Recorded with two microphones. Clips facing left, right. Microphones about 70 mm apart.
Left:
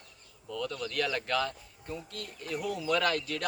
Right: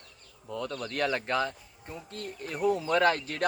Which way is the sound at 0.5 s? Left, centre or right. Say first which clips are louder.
Even; right.